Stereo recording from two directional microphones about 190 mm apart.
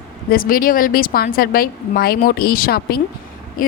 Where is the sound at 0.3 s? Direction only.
50° left (ahead or behind).